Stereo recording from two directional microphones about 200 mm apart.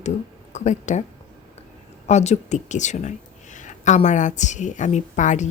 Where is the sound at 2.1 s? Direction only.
35° left (ahead or behind).